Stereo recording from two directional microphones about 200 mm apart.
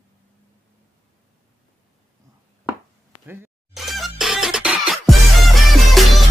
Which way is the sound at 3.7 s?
Centre (ahead or behind).